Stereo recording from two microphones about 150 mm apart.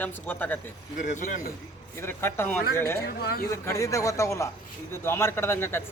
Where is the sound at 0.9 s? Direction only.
60° left (ahead or behind).